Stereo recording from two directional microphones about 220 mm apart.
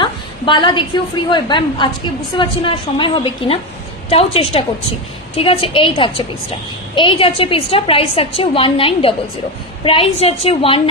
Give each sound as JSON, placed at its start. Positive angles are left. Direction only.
{"t": 0.0, "sound": "a woman's voice", "side_deg": 20}